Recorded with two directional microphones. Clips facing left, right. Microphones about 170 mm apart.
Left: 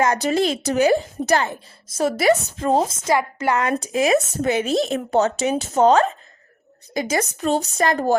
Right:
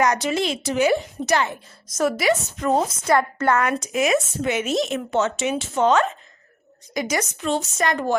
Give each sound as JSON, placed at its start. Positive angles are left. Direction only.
{"t": 0.0, "sound": "a woman's voice", "side_deg": 35}
{"t": 3.2, "sound": "a woman's voice", "side_deg": 15}